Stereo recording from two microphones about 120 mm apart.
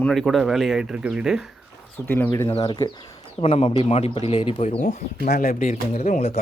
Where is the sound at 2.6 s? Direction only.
40° left (ahead or behind).